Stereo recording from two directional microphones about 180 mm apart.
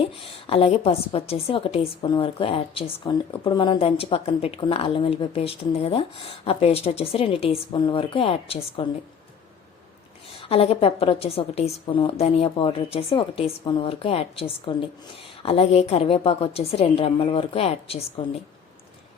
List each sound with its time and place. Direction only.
0.0 s a woman's voice: 30° left (ahead or behind)
10.3 s a woman's voice: 35° left (ahead or behind)